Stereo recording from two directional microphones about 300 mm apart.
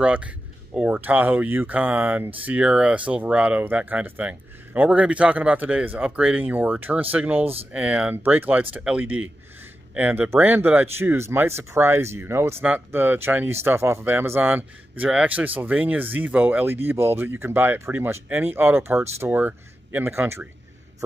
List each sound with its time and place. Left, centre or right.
0.0 s speech: centre